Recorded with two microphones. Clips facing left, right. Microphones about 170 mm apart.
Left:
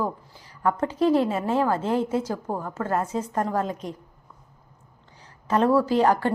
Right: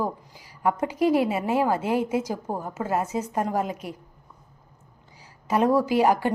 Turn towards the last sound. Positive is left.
turn(degrees=-10)  # may be behind; listen again after turning